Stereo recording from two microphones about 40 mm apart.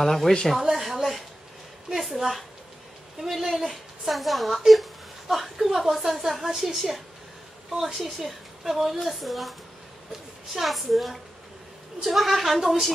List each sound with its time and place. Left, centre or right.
0.0 s speech: centre
0.5 s a sound: centre
3.2 s a woman's voice: centre